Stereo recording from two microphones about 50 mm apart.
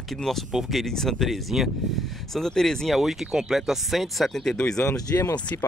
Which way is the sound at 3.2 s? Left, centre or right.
Centre.